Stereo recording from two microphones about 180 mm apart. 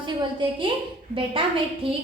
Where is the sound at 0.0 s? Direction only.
25° right (ahead or behind).